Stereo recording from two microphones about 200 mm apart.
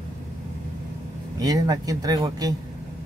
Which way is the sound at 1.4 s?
20° right (ahead or behind).